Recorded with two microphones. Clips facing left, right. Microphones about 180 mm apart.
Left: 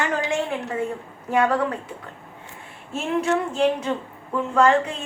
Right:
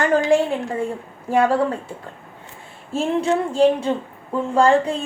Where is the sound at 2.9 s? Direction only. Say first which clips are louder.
Right 3 dB; 30° right (ahead or behind).